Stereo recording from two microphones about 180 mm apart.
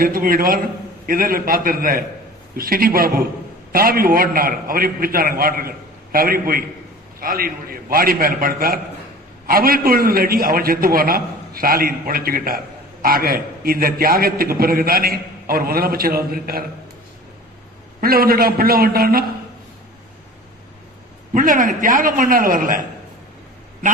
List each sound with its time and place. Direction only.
0.0 s a man's voice: 55° right (ahead or behind)
18.0 s a man's voice: 55° right (ahead or behind)
21.3 s a man's voice: 45° right (ahead or behind)